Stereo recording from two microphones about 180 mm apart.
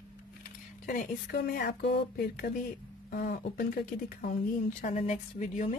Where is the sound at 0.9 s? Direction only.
55° left (ahead or behind).